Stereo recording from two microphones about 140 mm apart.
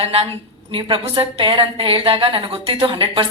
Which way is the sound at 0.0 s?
45° right (ahead or behind).